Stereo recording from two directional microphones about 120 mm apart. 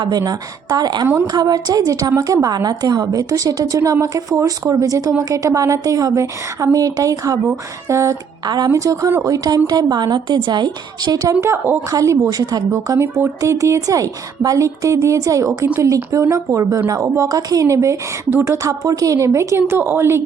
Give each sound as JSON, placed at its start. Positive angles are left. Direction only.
{"t": 0.0, "sound": "a woman's voice", "side_deg": -35}
{"t": 1.0, "sound": "a woman's voice", "side_deg": -15}
{"t": 1.3, "sound": "a woman's voice", "side_deg": -35}